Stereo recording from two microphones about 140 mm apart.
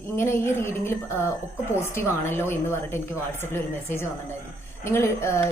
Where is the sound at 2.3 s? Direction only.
15° left (ahead or behind).